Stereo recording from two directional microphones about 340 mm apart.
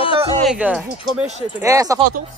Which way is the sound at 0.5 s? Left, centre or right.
Centre.